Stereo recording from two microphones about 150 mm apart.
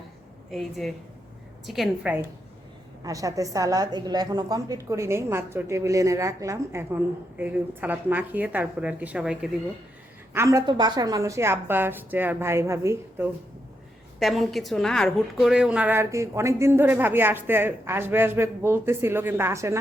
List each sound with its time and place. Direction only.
0.5 s a woman's voice: centre (ahead or behind)
3.0 s a woman's voice: 20° right (ahead or behind); by 9.5 s 5° right (ahead or behind)
10.3 s a woman's voice: 20° right (ahead or behind)
14.2 s a woman's voice: centre (ahead or behind); by 19.8 s 20° right (ahead or behind)